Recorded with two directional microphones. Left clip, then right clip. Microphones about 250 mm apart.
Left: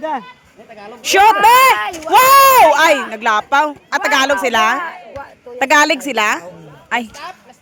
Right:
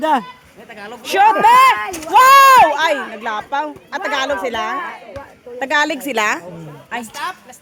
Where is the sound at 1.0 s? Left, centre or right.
Left.